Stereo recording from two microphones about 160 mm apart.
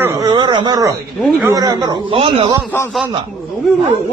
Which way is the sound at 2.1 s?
35° right (ahead or behind).